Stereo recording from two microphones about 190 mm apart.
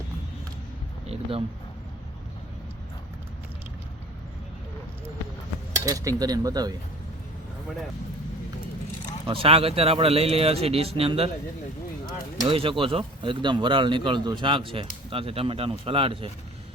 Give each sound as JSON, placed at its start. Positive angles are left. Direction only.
{"t": 1.0, "sound": "speech", "side_deg": -30}
{"t": 5.7, "sound": "speech", "side_deg": -20}
{"t": 9.2, "sound": "speech", "side_deg": -30}
{"t": 12.5, "sound": "speech", "side_deg": -30}